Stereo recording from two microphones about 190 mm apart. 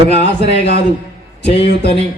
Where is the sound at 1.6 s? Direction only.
60° left (ahead or behind).